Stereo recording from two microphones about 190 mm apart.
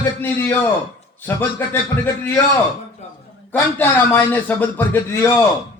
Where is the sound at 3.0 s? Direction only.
35° left (ahead or behind).